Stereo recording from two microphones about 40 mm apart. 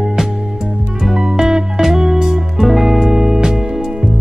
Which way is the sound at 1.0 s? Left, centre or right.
Centre.